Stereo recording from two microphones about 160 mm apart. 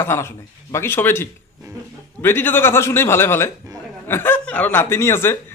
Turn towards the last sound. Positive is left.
turn(degrees=15)  # may be behind; listen again after turning